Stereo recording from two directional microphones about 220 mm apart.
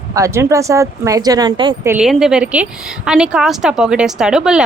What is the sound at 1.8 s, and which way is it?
A woman's voice, 5° right (ahead or behind).